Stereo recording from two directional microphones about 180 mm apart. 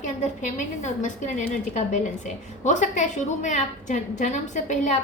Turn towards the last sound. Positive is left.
turn(degrees=45)  # may be behind; listen again after turning